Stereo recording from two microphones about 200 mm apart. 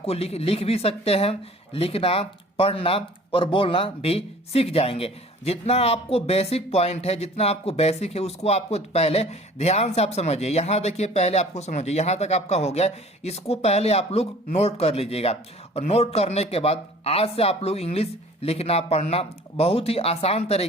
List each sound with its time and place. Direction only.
0.0 s speech: 30° left (ahead or behind)